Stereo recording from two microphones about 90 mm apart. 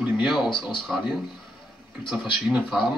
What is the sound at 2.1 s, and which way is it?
Speech, 15° right (ahead or behind).